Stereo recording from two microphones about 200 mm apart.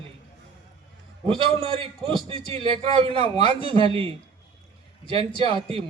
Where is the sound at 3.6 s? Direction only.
25° right (ahead or behind).